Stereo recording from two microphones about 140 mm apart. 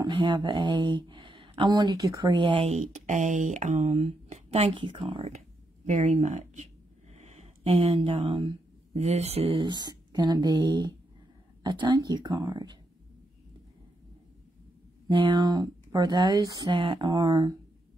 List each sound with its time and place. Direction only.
0.0 s speech: 35° right (ahead or behind)
5.9 s speech: 60° right (ahead or behind)
9.6 s speech: 30° right (ahead or behind)
15.0 s speech: 35° right (ahead or behind)